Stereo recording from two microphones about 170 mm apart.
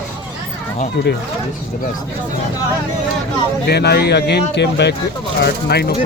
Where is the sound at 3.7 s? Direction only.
70° left (ahead or behind); by 4.9 s 90° left.